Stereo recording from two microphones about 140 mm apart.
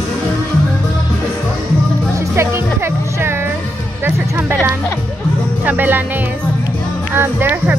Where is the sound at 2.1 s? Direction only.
20° right (ahead or behind).